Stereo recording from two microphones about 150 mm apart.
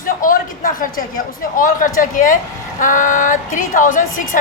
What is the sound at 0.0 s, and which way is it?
A woman's voice, 70° left (ahead or behind).